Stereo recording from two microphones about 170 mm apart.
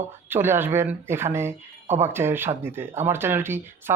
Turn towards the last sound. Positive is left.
turn(degrees=-15)  # may be behind; listen again after turning